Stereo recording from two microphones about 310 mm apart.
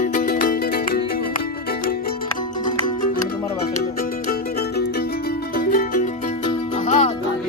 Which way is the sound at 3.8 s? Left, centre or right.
Left.